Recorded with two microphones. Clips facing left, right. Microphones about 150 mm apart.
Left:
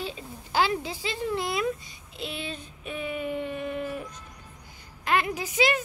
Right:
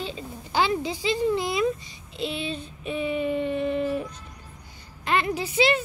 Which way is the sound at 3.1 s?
10° left (ahead or behind).